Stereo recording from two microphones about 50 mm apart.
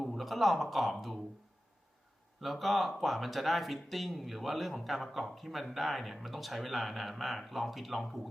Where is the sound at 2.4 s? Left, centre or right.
Centre.